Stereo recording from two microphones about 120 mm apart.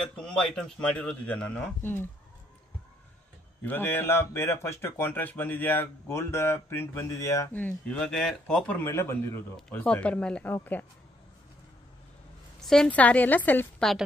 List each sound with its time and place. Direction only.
0.2 s a man's voice: 5° left (ahead or behind)
3.6 s a man's voice: 20° left (ahead or behind)
9.8 s a man's voice: 10° left (ahead or behind)
12.5 s a man's voice: 5° left (ahead or behind)